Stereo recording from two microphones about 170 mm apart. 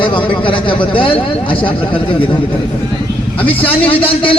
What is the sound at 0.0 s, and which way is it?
A man's voice, 30° left (ahead or behind).